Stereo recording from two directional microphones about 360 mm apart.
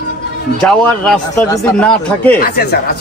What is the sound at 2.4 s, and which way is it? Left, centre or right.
Speech, left.